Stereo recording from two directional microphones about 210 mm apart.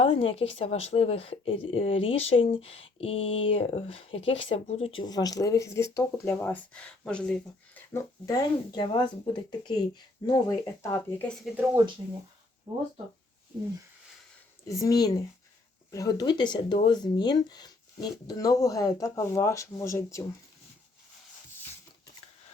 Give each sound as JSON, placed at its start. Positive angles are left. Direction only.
{"t": 0.0, "sound": "speech", "side_deg": 25}
{"t": 7.9, "sound": "speech", "side_deg": 15}
{"t": 11.4, "sound": "speech", "side_deg": -10}
{"t": 14.7, "sound": "speech", "side_deg": 15}